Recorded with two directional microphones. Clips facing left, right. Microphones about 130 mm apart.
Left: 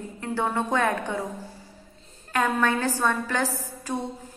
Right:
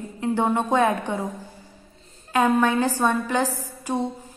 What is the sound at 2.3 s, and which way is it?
A woman's voice, 15° right (ahead or behind).